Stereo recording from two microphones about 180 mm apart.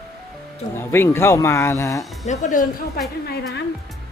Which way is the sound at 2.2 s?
40° left (ahead or behind).